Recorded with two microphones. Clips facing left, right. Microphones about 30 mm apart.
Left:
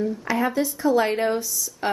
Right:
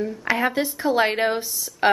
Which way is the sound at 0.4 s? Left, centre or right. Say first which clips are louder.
Even; right.